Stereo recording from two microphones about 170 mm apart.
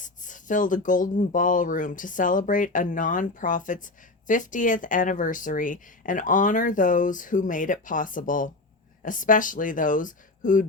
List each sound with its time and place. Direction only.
0.0 s speech: 50° left (ahead or behind)